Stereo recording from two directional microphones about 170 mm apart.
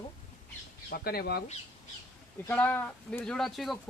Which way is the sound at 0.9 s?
65° left (ahead or behind).